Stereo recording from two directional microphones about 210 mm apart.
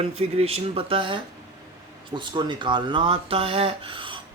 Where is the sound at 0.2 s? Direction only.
30° right (ahead or behind).